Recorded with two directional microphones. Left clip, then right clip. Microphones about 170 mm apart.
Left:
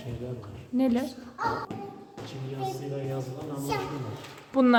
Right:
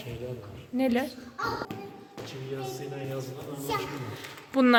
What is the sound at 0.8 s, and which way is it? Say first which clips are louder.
Speech: even; 10° left (ahead or behind).